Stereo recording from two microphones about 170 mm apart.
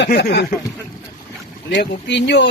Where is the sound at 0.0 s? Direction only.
85° left.